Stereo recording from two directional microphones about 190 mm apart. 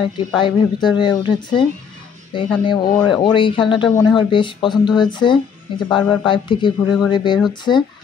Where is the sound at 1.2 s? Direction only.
25° left (ahead or behind).